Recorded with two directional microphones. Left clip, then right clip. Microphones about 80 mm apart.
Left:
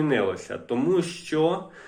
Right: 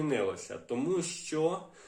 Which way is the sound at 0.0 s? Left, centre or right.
Right.